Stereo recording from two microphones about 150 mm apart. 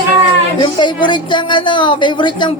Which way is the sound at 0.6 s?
30° left (ahead or behind).